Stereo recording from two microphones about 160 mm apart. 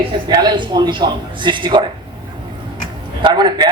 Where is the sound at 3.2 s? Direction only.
30° right (ahead or behind).